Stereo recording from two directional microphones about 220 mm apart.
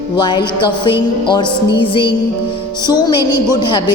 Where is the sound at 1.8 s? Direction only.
20° left (ahead or behind).